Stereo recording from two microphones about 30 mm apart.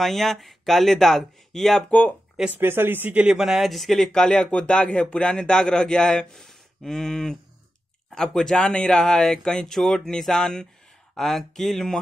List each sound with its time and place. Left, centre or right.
0.0 s speech: centre
1.9 s speech: left
2.5 s speech: right
3.4 s speech: centre
4.5 s speech: left
11.1 s speech: centre